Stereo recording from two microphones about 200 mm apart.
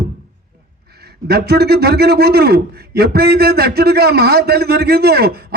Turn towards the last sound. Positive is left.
turn(degrees=-50)  # may be behind; listen again after turning